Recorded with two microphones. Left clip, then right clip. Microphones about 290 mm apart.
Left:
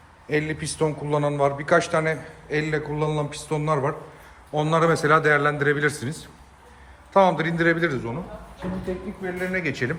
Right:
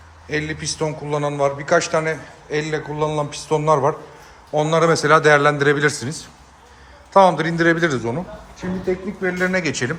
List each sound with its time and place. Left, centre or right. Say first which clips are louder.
0.3 s a man's voice: right 2 dB; centre
9.4 s a man's voice: right 4 dB; centre